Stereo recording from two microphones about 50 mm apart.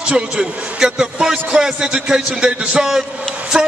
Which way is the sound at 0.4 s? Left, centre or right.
Centre.